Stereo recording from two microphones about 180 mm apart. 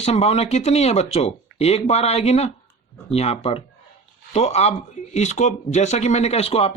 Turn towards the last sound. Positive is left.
turn(degrees=35)  # may be behind; listen again after turning